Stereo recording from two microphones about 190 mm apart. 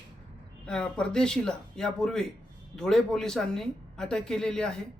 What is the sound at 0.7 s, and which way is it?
Speech, 5° left (ahead or behind).